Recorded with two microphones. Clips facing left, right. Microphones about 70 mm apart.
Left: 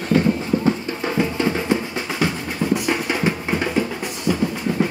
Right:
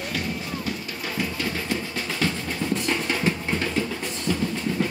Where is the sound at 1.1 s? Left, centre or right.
Left.